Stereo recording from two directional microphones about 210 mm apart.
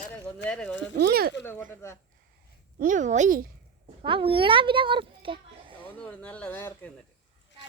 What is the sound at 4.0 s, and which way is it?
A woman's voice, 25° right (ahead or behind).